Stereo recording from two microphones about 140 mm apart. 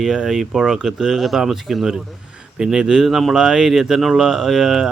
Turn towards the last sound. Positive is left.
turn(degrees=-5)  # may be behind; listen again after turning